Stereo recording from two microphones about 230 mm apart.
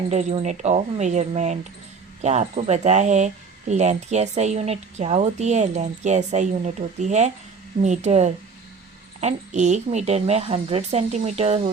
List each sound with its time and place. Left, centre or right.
0.1 s speech: right